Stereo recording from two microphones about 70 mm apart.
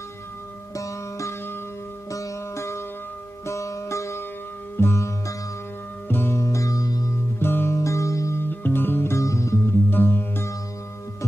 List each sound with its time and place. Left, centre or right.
0.7 s sitar: left
3.4 s music: left
4.7 s sitar: left
6.0 s music: left
7.3 s music: left
8.5 s music: left
9.8 s music: left